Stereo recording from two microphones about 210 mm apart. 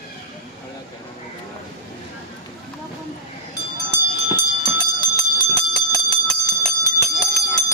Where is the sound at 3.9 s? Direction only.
20° left (ahead or behind).